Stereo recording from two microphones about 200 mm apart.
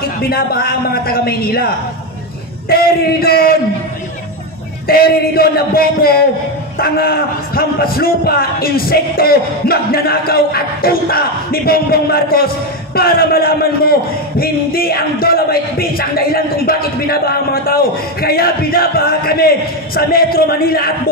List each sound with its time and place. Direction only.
0.3 s a man's voice: 50° left (ahead or behind)
2.7 s a man's voice: 50° left (ahead or behind)
4.8 s a man's voice: 50° left (ahead or behind)